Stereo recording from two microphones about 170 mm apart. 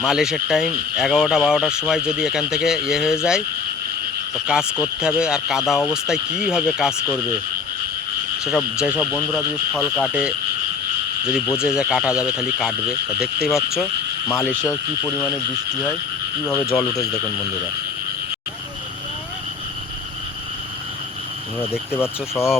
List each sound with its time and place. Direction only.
0.0 s speech: 5° right (ahead or behind)
4.5 s speech: 5° right (ahead or behind)
8.4 s speech: centre (ahead or behind)
10.0 s speech: 5° right (ahead or behind)
11.6 s speech: 5° right (ahead or behind)
14.6 s speech: 5° left (ahead or behind)
16.5 s speech: 5° left (ahead or behind)
21.9 s speech: 15° left (ahead or behind)